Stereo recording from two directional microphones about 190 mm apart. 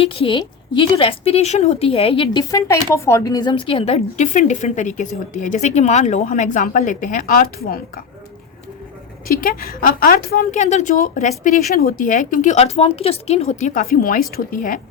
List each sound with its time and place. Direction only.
0.0 s a woman's voice: 30° left (ahead or behind); by 8.0 s 50° left (ahead or behind)
9.2 s a woman's voice: 50° left (ahead or behind)